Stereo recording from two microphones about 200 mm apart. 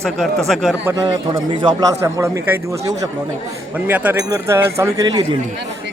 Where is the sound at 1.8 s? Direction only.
15° right (ahead or behind).